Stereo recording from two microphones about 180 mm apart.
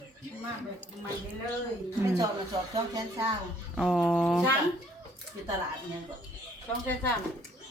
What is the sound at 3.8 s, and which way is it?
Speech, 5° right (ahead or behind).